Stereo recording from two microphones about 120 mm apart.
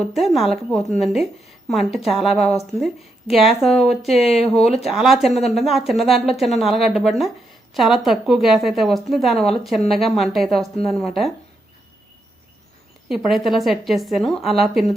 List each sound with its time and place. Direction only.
0.0 s a woman's voice: centre (ahead or behind)
13.1 s a woman's voice: centre (ahead or behind)